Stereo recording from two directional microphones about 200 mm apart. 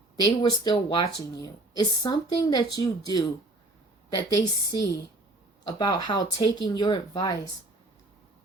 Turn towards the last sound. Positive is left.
turn(degrees=20)  # may be behind; listen again after turning